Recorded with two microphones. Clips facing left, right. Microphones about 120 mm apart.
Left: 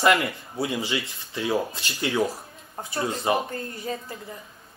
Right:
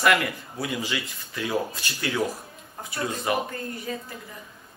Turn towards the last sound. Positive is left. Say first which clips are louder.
# left 1 dB
turn(degrees=30)  # may be behind; listen again after turning